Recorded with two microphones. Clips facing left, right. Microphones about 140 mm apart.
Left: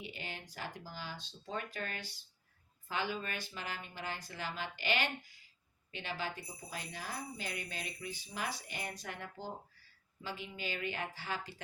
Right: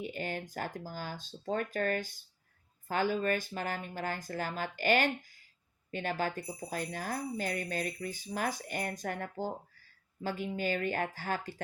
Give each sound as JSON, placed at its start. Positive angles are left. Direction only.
{"t": 0.0, "sound": "jingle bell", "side_deg": -45}